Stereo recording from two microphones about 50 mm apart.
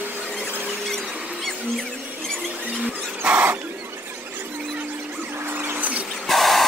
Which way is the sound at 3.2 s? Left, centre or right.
Right.